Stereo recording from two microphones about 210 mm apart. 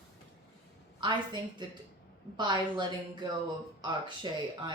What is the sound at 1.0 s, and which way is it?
Speech, 20° right (ahead or behind).